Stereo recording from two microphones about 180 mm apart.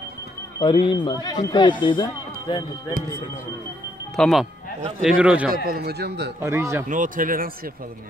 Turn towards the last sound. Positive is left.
turn(degrees=-50)  # may be behind; listen again after turning